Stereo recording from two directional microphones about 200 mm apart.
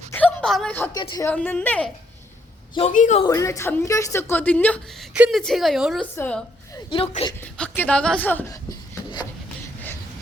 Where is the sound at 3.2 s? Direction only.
15° left (ahead or behind).